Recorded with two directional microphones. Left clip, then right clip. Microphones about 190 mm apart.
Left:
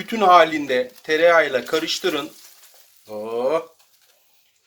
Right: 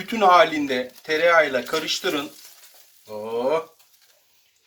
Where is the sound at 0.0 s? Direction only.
55° left (ahead or behind).